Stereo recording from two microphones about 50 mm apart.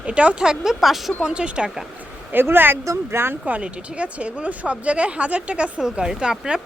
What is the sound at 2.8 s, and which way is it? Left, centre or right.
Speech, right.